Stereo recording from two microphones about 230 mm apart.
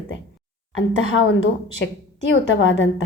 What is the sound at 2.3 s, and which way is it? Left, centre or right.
Speech, left.